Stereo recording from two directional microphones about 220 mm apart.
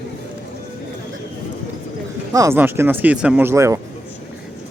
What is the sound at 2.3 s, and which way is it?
Speech, 15° right (ahead or behind).